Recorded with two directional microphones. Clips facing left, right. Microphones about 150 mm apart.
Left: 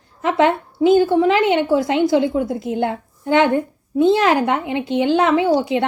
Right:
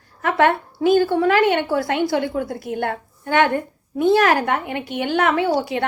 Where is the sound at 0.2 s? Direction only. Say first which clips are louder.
Left 1 dB; 20° left (ahead or behind).